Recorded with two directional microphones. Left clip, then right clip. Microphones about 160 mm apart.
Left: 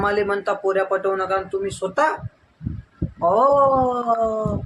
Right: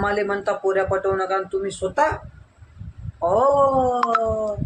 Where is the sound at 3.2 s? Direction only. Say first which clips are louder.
Left 2 dB; centre (ahead or behind).